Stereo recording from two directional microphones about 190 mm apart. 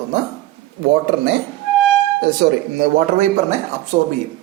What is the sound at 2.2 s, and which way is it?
Speech, 60° right (ahead or behind).